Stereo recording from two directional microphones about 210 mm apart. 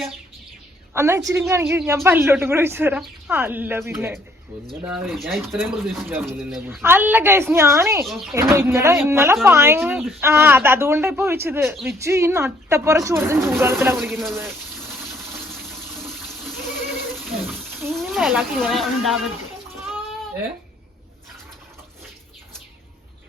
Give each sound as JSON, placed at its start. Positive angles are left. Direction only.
{"t": 0.9, "sound": "speech", "side_deg": -15}
{"t": 4.9, "sound": "speech", "side_deg": 0}
{"t": 8.0, "sound": "speech", "side_deg": 0}
{"t": 8.4, "sound": "speech", "side_deg": -10}
{"t": 16.0, "sound": "water", "side_deg": 0}
{"t": 17.2, "sound": "bathtub", "side_deg": 0}
{"t": 17.9, "sound": "speech", "side_deg": 0}